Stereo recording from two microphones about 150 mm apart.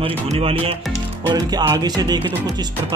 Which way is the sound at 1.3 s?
25° right (ahead or behind).